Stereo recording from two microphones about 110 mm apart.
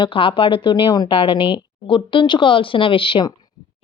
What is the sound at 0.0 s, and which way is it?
Speech, 50° left (ahead or behind).